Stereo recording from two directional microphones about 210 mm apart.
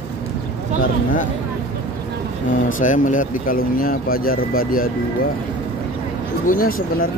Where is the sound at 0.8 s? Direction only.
40° left (ahead or behind).